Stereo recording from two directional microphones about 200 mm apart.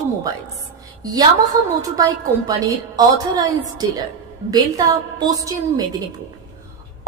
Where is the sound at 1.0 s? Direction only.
20° right (ahead or behind).